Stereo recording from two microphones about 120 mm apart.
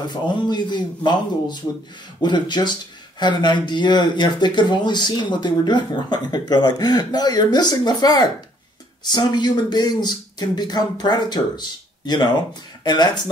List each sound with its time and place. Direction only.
0.4 s speech: 35° left (ahead or behind)
12.8 s speech: 35° left (ahead or behind)